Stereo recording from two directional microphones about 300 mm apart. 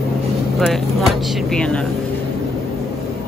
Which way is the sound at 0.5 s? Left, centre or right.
Centre.